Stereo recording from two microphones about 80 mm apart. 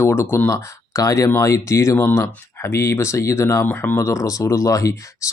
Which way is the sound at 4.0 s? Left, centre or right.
Left.